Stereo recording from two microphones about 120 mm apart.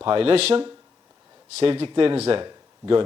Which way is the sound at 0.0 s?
50° right (ahead or behind).